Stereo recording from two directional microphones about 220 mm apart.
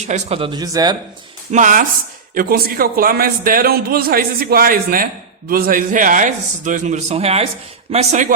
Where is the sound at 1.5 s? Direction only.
35° right (ahead or behind).